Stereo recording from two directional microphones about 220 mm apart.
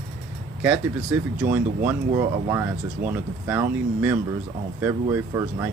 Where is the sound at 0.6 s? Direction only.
5° right (ahead or behind).